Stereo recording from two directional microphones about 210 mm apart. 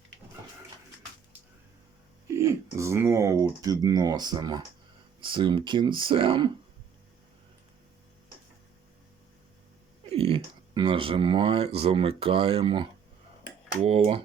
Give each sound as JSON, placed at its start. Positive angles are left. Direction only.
{"t": 2.2, "sound": "typing", "side_deg": -15}
{"t": 5.2, "sound": "speech", "side_deg": -25}
{"t": 10.1, "sound": "speech", "side_deg": -25}